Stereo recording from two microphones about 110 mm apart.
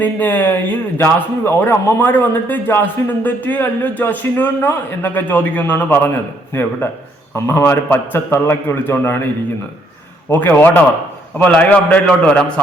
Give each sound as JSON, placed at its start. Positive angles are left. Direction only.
{"t": 0.0, "sound": "a man's voice", "side_deg": 15}